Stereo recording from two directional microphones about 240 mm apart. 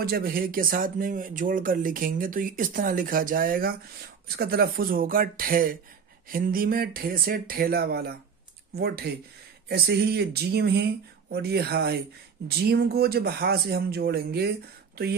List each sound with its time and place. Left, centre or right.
0.0 s speech: right